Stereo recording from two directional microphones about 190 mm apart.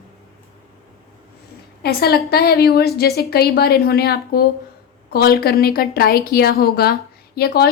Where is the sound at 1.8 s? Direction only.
55° left (ahead or behind).